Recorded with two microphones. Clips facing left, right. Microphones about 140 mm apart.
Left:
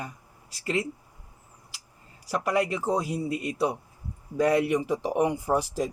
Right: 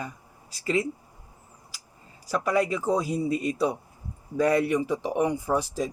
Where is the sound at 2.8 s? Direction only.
Centre (ahead or behind).